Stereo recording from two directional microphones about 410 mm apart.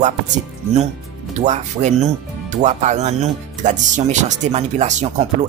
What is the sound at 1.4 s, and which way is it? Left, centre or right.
Speech, centre.